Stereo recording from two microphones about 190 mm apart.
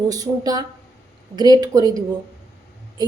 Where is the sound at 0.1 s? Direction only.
20° right (ahead or behind).